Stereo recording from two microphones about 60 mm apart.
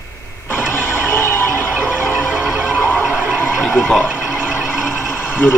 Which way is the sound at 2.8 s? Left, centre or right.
Left.